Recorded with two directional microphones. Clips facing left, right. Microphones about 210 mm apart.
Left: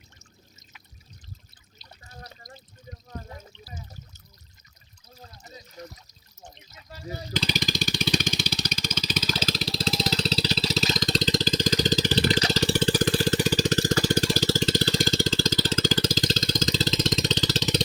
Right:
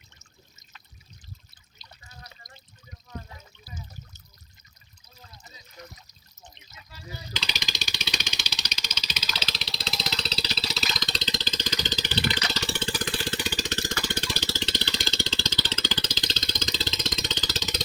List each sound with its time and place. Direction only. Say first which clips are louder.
1.8 s trickle: left 4 dB; 35° left (ahead or behind)
3.5 s trickle: left 5 dB; 25° left (ahead or behind)
5.2 s a sound: left 6 dB; 40° left (ahead or behind)